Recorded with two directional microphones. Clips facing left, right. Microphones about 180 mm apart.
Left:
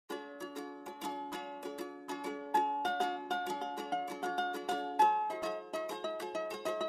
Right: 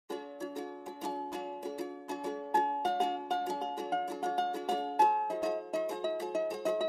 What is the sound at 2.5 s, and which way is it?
Music, 5° right (ahead or behind).